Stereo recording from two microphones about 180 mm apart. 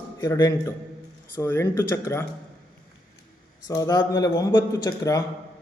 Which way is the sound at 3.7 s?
20° left (ahead or behind).